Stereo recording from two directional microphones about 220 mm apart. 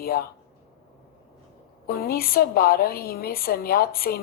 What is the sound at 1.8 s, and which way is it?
A woman's voice, 45° left (ahead or behind).